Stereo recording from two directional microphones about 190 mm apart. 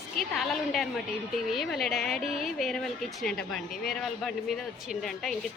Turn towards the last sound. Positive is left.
turn(degrees=0)  # may be behind; listen again after turning